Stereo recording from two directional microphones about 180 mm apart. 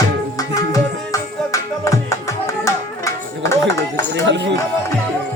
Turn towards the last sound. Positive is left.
turn(degrees=-75)  # may be behind; listen again after turning